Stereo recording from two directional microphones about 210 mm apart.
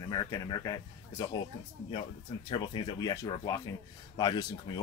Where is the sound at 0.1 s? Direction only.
20° left (ahead or behind).